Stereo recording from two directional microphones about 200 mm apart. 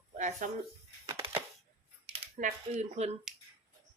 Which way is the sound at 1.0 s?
15° right (ahead or behind).